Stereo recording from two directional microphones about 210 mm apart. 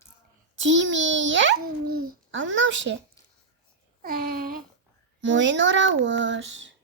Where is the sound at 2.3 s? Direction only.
65° right (ahead or behind).